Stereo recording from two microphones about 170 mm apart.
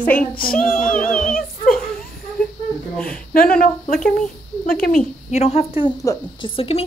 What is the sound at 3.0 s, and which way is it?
Speech, 55° left (ahead or behind).